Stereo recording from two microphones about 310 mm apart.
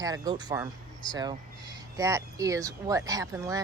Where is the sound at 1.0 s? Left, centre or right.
Centre.